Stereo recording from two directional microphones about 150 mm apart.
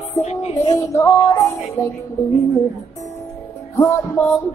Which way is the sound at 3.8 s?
15° left (ahead or behind).